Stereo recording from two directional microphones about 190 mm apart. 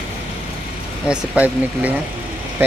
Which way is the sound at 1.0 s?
5° right (ahead or behind).